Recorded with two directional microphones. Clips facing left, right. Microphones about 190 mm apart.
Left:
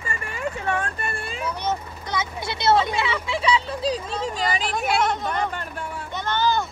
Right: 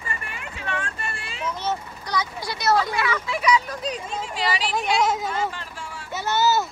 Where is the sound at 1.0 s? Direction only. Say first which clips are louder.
Left 4 dB; 55° left (ahead or behind).